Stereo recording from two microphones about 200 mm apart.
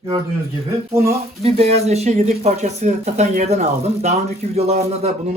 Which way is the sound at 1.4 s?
30° right (ahead or behind).